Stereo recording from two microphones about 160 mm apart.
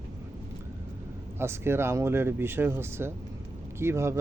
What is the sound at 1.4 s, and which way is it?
Speech, 15° right (ahead or behind).